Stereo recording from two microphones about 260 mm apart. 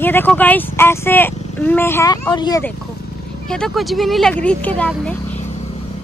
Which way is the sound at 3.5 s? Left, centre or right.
Centre.